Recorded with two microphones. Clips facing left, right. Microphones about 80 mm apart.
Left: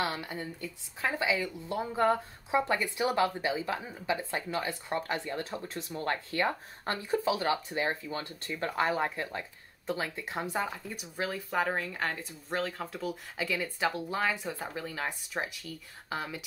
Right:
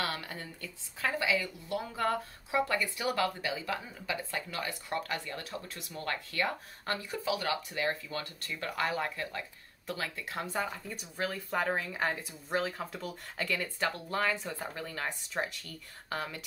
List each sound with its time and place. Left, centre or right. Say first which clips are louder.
0.0 s speech: left 3 dB; centre